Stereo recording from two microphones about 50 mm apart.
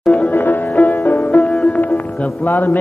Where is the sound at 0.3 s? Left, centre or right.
Left.